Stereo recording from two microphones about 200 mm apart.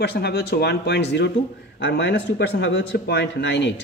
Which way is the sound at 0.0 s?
55° left (ahead or behind).